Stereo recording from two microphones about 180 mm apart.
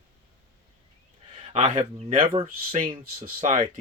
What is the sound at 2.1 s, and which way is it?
Speech, 30° right (ahead or behind).